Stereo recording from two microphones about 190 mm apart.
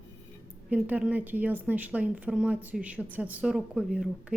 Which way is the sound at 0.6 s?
10° right (ahead or behind).